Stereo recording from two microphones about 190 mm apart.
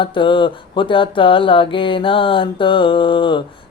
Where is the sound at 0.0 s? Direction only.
25° left (ahead or behind).